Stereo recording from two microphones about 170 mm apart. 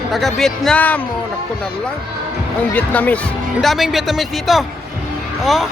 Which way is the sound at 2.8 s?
10° left (ahead or behind).